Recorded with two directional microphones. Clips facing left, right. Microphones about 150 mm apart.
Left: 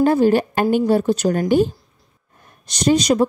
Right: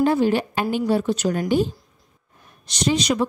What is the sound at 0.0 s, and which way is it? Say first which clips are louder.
A woman's voice: left 4 dB; 45° left (ahead or behind).